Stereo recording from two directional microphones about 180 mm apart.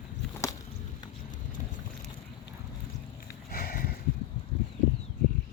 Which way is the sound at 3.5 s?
55° left (ahead or behind).